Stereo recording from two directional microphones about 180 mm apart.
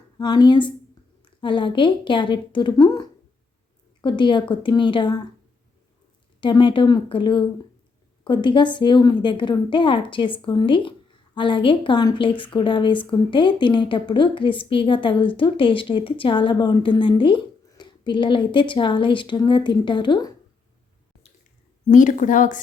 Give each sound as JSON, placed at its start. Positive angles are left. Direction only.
{"t": 0.2, "sound": "a woman's voice", "side_deg": 25}
{"t": 6.4, "sound": "a woman's voice", "side_deg": 25}
{"t": 21.8, "sound": "a woman's voice", "side_deg": 45}